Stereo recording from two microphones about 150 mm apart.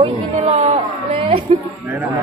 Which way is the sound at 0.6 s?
40° right (ahead or behind).